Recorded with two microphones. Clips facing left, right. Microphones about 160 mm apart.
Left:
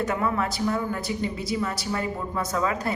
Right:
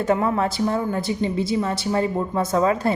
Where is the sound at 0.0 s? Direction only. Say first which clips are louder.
Right 5 dB; 30° right (ahead or behind).